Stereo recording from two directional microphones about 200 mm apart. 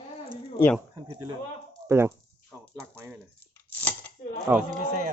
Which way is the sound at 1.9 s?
10° right (ahead or behind).